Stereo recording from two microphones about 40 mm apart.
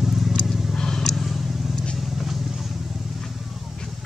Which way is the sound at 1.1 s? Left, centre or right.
Centre.